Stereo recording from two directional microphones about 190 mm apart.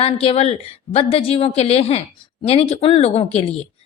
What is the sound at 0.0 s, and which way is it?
A woman's voice, 30° left (ahead or behind).